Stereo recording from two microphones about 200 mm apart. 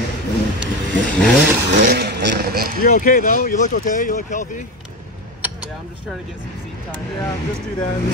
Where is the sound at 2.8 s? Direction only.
40° left (ahead or behind).